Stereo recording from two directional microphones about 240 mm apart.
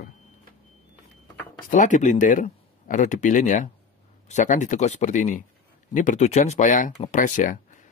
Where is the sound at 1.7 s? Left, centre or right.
Left.